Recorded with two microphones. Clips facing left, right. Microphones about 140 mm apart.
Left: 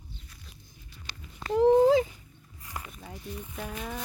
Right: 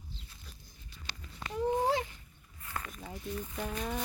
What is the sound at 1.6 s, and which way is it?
Speech, 90° left.